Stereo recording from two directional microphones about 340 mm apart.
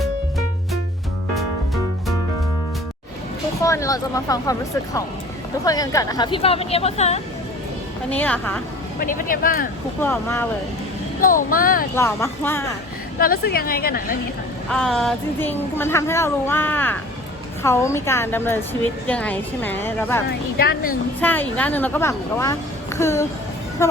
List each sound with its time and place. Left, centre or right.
1.4 s music: centre
3.6 s a woman's voice: centre
5.6 s a woman's voice: centre
8.1 s speech: centre
9.0 s a woman's voice: left
10.0 s a woman's voice: centre
11.2 s a woman's voice: left
11.9 s a woman's voice: centre
13.1 s a woman's voice: left
14.7 s a woman's voice: centre
20.6 s a woman's voice: left
21.2 s a woman's voice: centre